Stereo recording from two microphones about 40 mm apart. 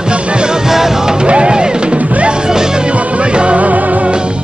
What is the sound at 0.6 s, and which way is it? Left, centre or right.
Music, centre.